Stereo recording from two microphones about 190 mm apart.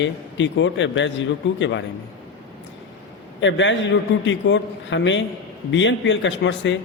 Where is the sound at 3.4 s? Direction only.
75° left (ahead or behind).